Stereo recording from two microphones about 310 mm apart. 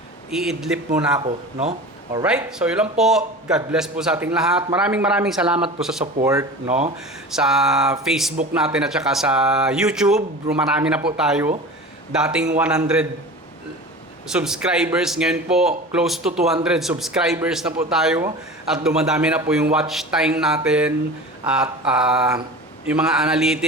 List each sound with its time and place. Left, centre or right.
0.3 s a man's voice: centre
1.2 s speech: centre
2.2 s a man's voice: centre
14.3 s a man's voice: centre